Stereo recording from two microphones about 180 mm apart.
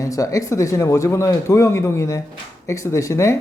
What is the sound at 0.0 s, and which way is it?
Speech, 20° left (ahead or behind).